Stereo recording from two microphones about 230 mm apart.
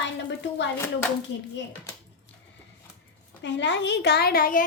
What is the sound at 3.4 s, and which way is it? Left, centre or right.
Speech, left.